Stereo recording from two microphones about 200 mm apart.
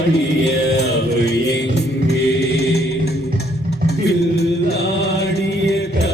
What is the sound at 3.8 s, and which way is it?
Music, 55° left (ahead or behind).